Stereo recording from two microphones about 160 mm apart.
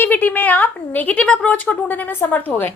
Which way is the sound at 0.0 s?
10° left (ahead or behind).